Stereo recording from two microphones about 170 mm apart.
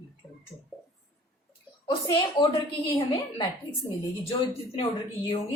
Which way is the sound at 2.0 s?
25° left (ahead or behind).